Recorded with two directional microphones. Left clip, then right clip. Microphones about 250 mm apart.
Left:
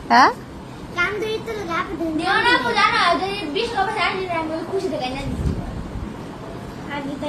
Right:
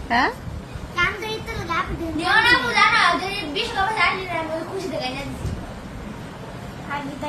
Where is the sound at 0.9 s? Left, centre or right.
Centre.